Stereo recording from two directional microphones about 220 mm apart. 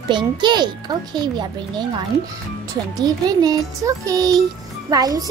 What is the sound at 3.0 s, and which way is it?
Speech, 15° right (ahead or behind).